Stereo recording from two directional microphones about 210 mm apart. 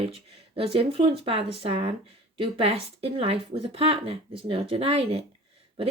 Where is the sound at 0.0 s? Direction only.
25° right (ahead or behind).